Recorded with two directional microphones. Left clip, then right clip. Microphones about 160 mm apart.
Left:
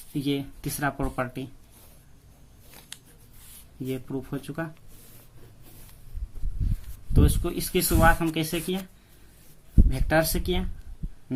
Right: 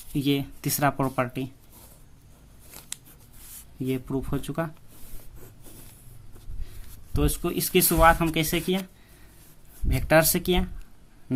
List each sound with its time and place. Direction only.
0.1 s speech: 35° right (ahead or behind)
3.8 s speech: 40° right (ahead or behind)
7.1 s speech: 30° right (ahead or behind)
9.9 s speech: 40° right (ahead or behind)
11.3 s heart sounds: 40° right (ahead or behind)